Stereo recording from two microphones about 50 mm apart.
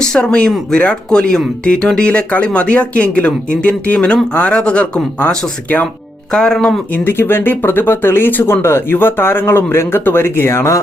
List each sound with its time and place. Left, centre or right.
0.1 s speech: left
6.3 s speech: centre
6.9 s speech: left